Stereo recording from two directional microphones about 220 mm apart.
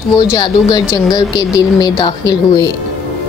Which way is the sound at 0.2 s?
20° left (ahead or behind).